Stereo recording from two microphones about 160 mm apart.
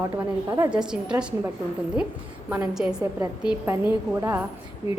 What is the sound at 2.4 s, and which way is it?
A woman's voice, 10° right (ahead or behind).